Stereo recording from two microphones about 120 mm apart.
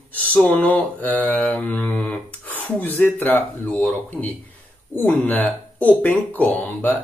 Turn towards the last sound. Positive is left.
turn(degrees=15)  # may be behind; listen again after turning